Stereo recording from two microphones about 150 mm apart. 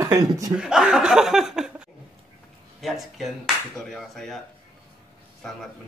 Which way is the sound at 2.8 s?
Centre (ahead or behind).